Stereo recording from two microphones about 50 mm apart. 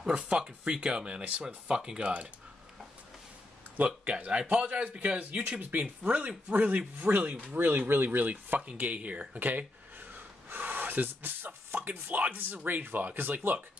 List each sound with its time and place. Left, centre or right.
0.0 s speech: centre
3.7 s speech: right
7.5 s speech: right